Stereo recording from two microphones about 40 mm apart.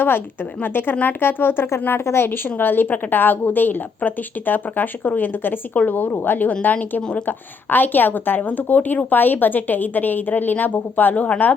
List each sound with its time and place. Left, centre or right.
0.6 s speech: left
1.8 s a woman's voice: left